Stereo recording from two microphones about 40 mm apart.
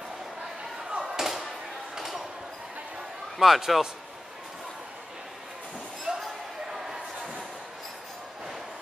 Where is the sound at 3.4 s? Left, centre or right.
Centre.